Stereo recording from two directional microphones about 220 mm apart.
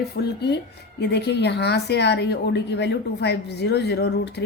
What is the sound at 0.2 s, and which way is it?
Speech, 50° left (ahead or behind).